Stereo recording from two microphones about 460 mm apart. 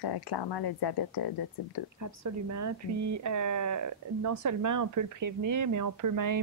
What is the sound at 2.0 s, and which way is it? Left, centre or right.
Speech, right.